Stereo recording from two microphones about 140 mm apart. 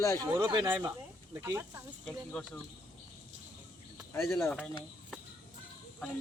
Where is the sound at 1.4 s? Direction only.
20° right (ahead or behind).